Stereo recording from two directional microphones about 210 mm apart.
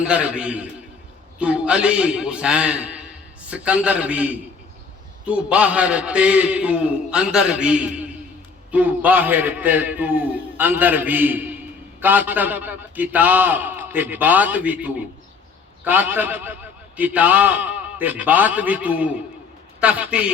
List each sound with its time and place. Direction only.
0.0 s a man's voice: 5° right (ahead or behind)